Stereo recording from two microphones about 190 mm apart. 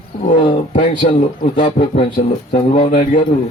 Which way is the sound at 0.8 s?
40° left (ahead or behind).